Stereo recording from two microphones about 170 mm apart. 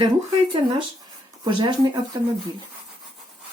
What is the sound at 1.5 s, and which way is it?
Speech, 25° right (ahead or behind).